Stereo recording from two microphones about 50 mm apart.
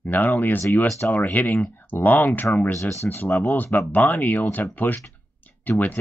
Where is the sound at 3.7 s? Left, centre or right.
Left.